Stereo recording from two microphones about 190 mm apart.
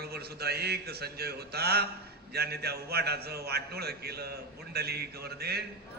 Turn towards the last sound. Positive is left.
turn(degrees=-55)  # may be behind; listen again after turning